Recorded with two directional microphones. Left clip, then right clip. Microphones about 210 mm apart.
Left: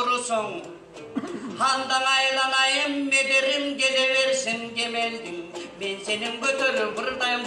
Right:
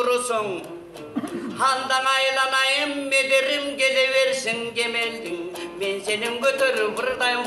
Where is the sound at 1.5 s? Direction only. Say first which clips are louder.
Right 2 dB; 50° right (ahead or behind).